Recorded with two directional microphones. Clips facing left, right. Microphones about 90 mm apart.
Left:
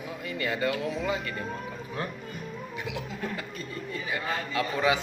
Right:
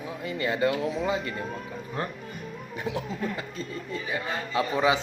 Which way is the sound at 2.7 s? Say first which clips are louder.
Right 6 dB; 35° right (ahead or behind).